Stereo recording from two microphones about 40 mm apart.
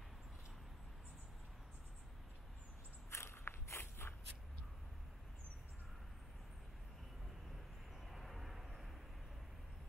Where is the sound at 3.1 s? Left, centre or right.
Left.